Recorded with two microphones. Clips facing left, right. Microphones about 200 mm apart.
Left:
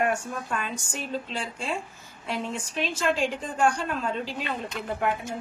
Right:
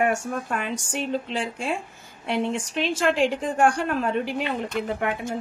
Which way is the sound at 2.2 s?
70° right (ahead or behind).